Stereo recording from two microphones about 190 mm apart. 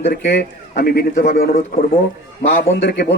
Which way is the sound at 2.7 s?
60° left (ahead or behind).